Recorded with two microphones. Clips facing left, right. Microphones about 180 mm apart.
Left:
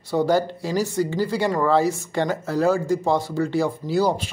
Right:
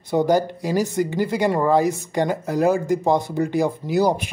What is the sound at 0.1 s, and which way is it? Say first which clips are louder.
Speech: right 2 dB; 15° right (ahead or behind).